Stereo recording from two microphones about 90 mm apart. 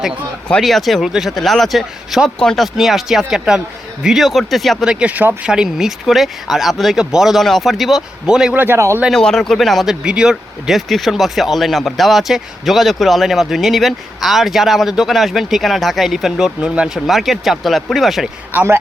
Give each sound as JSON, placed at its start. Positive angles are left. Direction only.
{"t": 0.6, "sound": "speech", "side_deg": 0}
{"t": 5.5, "sound": "speech", "side_deg": -5}
{"t": 8.5, "sound": "a man's voice", "side_deg": -25}
{"t": 9.1, "sound": "speech", "side_deg": 5}
{"t": 18.5, "sound": "a man's voice", "side_deg": -30}